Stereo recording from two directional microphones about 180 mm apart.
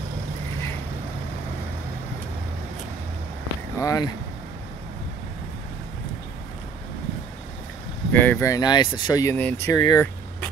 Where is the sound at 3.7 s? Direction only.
20° left (ahead or behind).